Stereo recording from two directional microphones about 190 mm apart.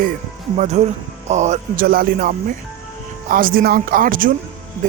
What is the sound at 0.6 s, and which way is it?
Speech, 35° right (ahead or behind).